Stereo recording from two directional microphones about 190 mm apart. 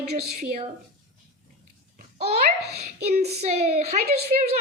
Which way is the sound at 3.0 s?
35° right (ahead or behind).